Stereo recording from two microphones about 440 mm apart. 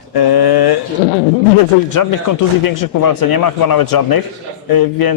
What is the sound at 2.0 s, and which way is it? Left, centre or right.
A man's voice, left.